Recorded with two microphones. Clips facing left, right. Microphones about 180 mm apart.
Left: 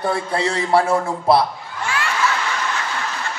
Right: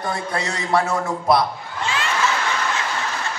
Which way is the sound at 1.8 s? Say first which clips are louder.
Left 1 dB; 20° right (ahead or behind).